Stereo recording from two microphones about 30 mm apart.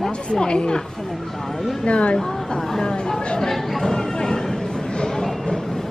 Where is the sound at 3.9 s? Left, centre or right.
Left.